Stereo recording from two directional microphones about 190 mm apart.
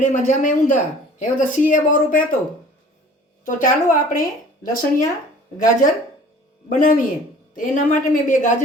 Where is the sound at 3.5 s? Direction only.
45° left (ahead or behind).